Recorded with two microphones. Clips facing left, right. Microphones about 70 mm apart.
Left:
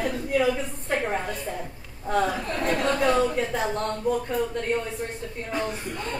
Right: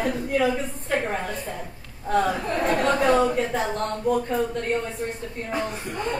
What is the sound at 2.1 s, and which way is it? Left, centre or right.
Speech, centre.